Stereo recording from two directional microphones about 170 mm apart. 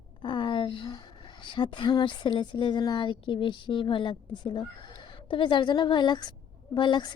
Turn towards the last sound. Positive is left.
turn(degrees=25)  # may be behind; listen again after turning